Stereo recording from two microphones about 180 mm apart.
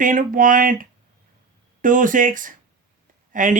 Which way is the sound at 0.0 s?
50° right (ahead or behind).